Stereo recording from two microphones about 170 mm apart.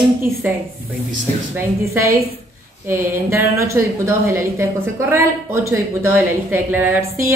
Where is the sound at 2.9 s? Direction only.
15° right (ahead or behind).